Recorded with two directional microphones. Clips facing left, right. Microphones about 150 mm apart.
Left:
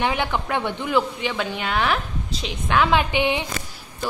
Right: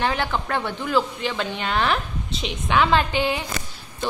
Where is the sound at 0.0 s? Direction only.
15° left (ahead or behind).